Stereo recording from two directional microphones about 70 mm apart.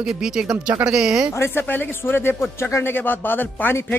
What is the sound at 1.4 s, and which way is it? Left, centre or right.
Speech, left.